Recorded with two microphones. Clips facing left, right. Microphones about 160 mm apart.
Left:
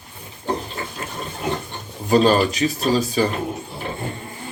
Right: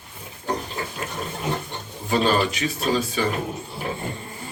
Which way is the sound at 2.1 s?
35° left (ahead or behind).